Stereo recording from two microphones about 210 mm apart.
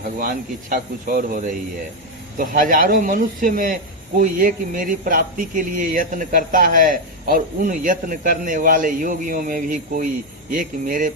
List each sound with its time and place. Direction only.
0.0 s speech: 40° right (ahead or behind)